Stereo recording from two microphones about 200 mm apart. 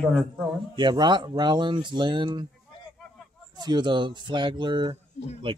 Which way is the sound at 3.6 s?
20° right (ahead or behind).